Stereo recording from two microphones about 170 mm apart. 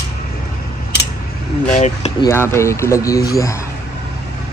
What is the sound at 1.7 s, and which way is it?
Speech, 40° left (ahead or behind).